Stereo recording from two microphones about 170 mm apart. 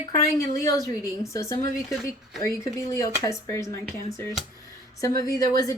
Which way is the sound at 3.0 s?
20° left (ahead or behind).